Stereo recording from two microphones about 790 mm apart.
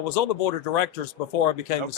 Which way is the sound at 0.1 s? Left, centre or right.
Left.